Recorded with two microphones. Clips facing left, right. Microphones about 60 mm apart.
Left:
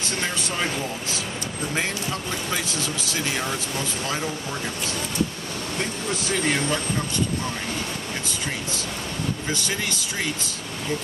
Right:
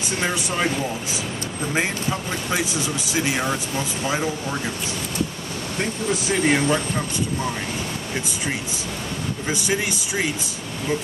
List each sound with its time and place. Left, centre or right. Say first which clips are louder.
2.5 s speech: right 5 dB; centre
6.2 s speech: right 4 dB; centre
9.5 s speech: right 4 dB; centre